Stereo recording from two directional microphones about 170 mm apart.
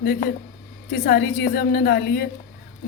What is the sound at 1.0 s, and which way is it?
Speech, 70° left (ahead or behind).